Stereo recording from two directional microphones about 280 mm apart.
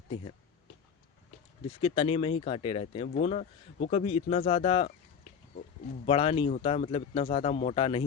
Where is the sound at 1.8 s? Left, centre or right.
Centre.